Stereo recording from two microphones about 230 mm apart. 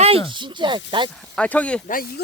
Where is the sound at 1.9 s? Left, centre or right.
Left.